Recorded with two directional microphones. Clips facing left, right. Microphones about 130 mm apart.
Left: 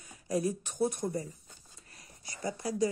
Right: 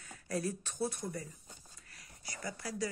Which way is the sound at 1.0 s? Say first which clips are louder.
Left 7 dB; 30° left (ahead or behind).